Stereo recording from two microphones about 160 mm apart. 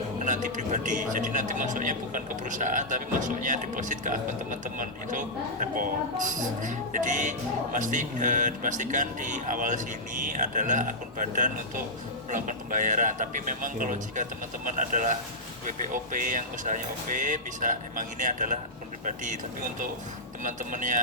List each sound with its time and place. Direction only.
0.3 s a man's voice: 50° right (ahead or behind)
5.7 s a man's voice: 55° right (ahead or behind)